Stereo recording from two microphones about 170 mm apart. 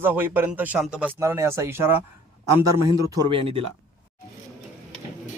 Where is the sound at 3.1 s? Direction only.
25° right (ahead or behind).